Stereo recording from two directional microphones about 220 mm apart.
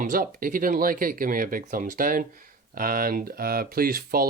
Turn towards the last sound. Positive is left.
turn(degrees=-40)  # may be behind; listen again after turning